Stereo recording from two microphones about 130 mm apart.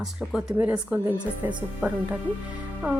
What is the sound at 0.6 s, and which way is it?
Speech, 15° right (ahead or behind).